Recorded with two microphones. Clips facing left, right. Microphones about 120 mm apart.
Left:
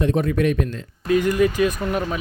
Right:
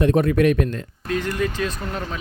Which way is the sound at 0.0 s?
60° right (ahead or behind).